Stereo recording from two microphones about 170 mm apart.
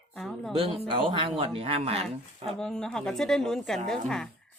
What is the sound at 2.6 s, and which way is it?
Speech, 5° left (ahead or behind).